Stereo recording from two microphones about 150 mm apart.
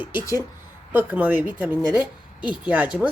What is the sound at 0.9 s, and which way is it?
A woman's voice, 10° right (ahead or behind).